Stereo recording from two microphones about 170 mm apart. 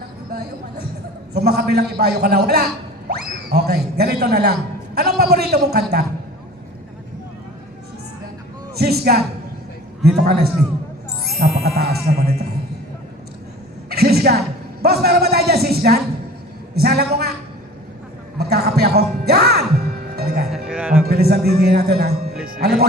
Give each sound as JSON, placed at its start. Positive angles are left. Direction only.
{"t": 1.3, "sound": "speech", "side_deg": -70}
{"t": 8.8, "sound": "speech", "side_deg": -65}
{"t": 13.9, "sound": "a sound", "side_deg": -70}
{"t": 18.3, "sound": "a sound", "side_deg": -70}
{"t": 20.1, "sound": "music", "side_deg": -70}
{"t": 20.7, "sound": "music", "side_deg": -10}
{"t": 21.1, "sound": "music", "side_deg": -65}